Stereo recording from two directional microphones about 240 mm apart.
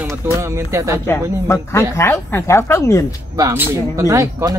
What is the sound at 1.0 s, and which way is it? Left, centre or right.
Speech, centre.